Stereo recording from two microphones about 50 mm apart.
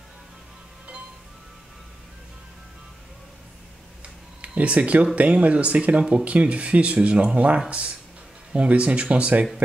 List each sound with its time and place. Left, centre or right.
4.4 s speech: right